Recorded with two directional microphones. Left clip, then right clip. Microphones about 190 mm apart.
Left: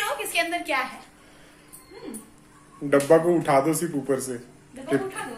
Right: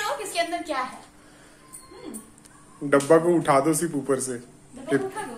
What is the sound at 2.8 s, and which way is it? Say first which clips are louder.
A man's voice: even; centre (ahead or behind).